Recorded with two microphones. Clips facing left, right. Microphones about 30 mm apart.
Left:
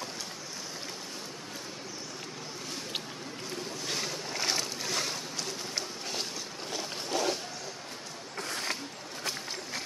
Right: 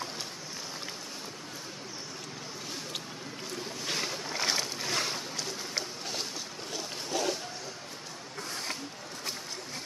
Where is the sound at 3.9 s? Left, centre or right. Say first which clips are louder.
Right 2 dB; centre.